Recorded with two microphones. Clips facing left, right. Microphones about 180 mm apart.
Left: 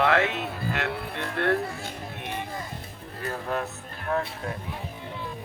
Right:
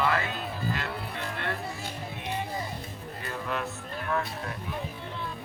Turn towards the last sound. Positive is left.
turn(degrees=35)  # may be behind; listen again after turning